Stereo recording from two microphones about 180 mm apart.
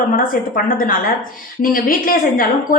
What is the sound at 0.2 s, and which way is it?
A woman's voice, 50° left (ahead or behind).